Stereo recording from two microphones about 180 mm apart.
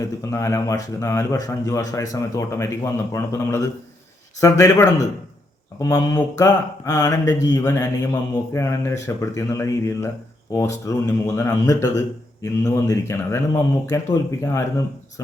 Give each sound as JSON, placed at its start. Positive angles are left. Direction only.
{"t": 0.0, "sound": "a man's voice", "side_deg": 15}